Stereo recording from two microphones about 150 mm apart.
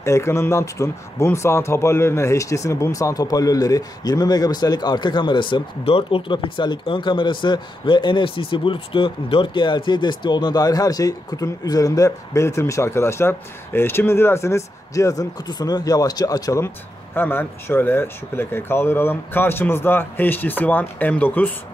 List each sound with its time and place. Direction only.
0.0 s speech: 20° left (ahead or behind)